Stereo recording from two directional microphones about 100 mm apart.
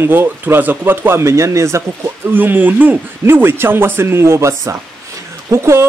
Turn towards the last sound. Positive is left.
turn(degrees=-25)  # may be behind; listen again after turning